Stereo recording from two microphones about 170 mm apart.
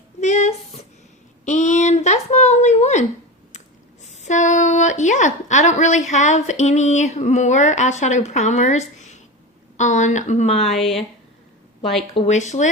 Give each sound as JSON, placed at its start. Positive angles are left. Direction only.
{"t": 0.2, "sound": "a sound", "side_deg": 45}
{"t": 4.0, "sound": "a woman's voice", "side_deg": 40}
{"t": 12.1, "sound": "a woman's voice", "side_deg": 40}